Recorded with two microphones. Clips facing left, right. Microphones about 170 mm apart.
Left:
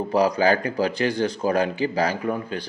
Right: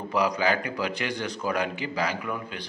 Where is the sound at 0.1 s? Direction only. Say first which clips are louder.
Left 5 dB; 35° left (ahead or behind).